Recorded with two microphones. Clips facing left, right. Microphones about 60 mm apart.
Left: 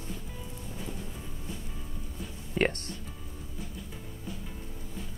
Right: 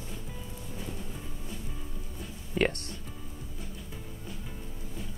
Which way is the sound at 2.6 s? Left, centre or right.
Left.